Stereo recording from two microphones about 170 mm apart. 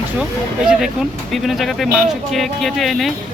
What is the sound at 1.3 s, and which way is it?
Speech, centre (ahead or behind).